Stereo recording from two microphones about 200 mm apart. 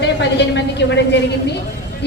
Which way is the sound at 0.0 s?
60° left (ahead or behind).